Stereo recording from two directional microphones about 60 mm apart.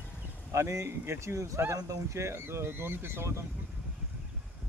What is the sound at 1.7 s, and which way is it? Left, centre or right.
Speech, right.